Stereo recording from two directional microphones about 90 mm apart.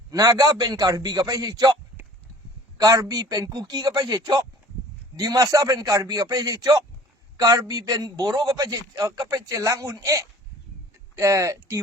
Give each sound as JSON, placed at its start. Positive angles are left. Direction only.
{"t": 0.1, "sound": "a man's voice", "side_deg": -45}
{"t": 2.7, "sound": "a man's voice", "side_deg": -40}